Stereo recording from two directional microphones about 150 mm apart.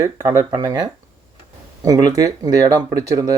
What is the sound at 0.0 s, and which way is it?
Speech, 25° right (ahead or behind).